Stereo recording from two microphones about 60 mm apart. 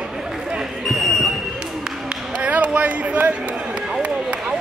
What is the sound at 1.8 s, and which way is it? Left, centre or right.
Speech, centre.